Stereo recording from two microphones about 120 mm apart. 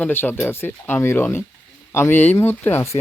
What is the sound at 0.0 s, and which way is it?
Speech, 15° left (ahead or behind).